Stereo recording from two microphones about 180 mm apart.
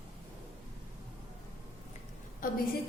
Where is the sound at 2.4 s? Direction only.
50° left (ahead or behind).